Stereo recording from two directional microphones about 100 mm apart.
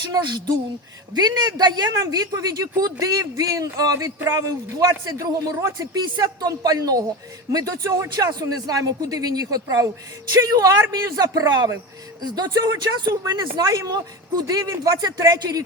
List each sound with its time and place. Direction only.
0.1 s a man's voice: 45° right (ahead or behind)